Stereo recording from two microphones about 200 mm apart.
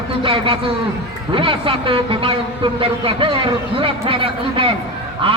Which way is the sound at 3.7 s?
25° right (ahead or behind).